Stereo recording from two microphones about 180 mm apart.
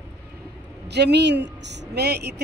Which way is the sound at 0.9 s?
70° right (ahead or behind).